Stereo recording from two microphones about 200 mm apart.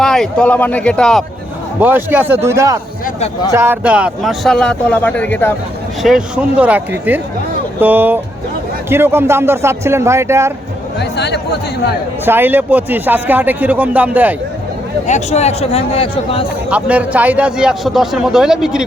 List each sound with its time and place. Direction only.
0.0 s a man's voice: centre (ahead or behind)
1.8 s a man's voice: 10° right (ahead or behind); by 5.5 s 10° left (ahead or behind)
6.0 s speech: centre (ahead or behind)
11.0 s a man's voice: 55° left (ahead or behind)
12.2 s speech: 10° right (ahead or behind)
15.0 s a man's voice: 35° left (ahead or behind)
16.6 s a man's voice: 5° right (ahead or behind)